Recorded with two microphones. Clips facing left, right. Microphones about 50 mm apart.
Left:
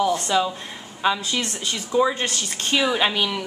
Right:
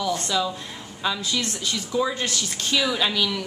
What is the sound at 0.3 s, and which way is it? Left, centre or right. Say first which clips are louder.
A woman's voice: left 3 dB; left.